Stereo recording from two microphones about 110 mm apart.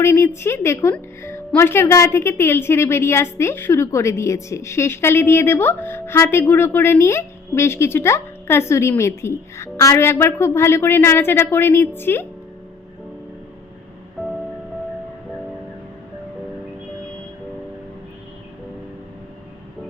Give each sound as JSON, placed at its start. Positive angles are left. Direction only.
{"t": 0.0, "sound": "speech", "side_deg": 25}